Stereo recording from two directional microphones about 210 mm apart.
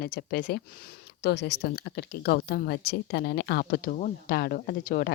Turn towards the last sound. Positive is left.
turn(degrees=45)  # may be behind; listen again after turning